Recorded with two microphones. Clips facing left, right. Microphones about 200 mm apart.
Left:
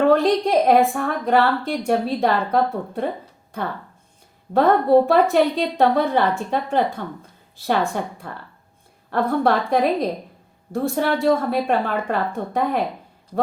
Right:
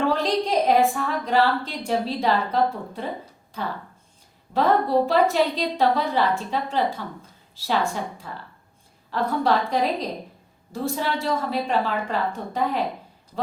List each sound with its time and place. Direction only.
0.0 s a woman's voice: 60° left (ahead or behind)